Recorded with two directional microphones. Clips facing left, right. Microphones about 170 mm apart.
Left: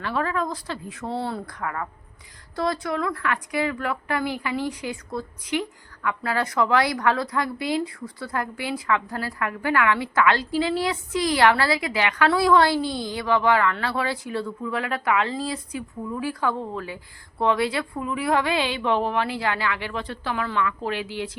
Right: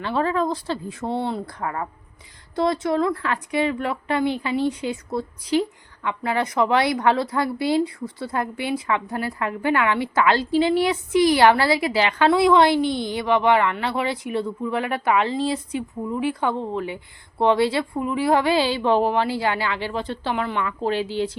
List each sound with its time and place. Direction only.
0.0 s a woman's voice: 30° right (ahead or behind)